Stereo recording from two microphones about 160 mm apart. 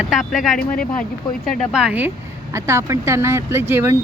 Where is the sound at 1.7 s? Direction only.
5° right (ahead or behind).